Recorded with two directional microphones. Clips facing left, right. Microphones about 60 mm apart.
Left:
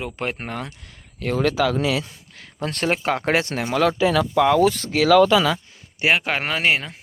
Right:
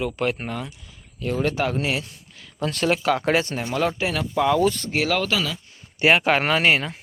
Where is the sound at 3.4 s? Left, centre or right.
Left.